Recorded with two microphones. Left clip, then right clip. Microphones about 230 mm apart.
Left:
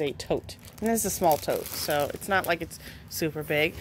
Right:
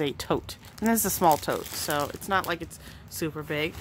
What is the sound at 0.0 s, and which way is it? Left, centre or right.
Speech, centre.